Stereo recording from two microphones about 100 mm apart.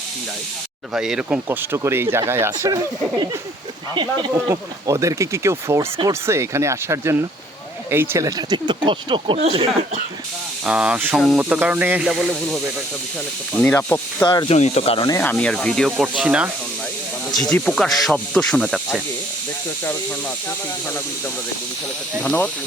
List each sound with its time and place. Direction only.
0.9 s speech: 5° right (ahead or behind)
1.5 s speech: 25° right (ahead or behind)
4.4 s speech: 30° right (ahead or behind)
8.4 s speech: 45° right (ahead or behind); by 9.6 s 60° right (ahead or behind)
10.7 s speech: 10° right (ahead or behind)
12.0 s snake: 5° right (ahead or behind)
13.7 s speech: 30° left (ahead or behind)
14.4 s speech: 90° left
15.2 s speech: 15° left (ahead or behind)
15.9 s speech: 5° right (ahead or behind)
17.3 s snake: 10° left (ahead or behind)
22.2 s speech: 20° left (ahead or behind)